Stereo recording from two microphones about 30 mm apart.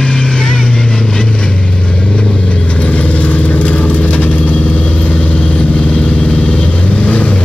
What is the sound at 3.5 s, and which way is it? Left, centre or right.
Vehicle, left.